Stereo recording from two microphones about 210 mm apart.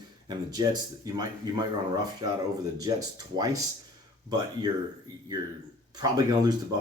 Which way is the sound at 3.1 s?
15° right (ahead or behind).